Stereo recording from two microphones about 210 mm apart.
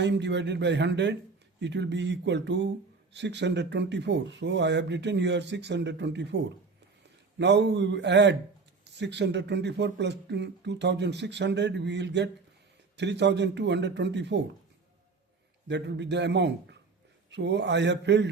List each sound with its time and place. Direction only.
0.0 s speech: 55° right (ahead or behind)
15.6 s speech: 55° right (ahead or behind)